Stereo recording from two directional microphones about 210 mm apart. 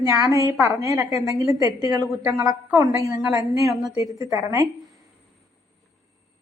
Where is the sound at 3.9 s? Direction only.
15° right (ahead or behind).